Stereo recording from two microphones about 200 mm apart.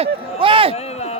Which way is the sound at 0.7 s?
30° left (ahead or behind).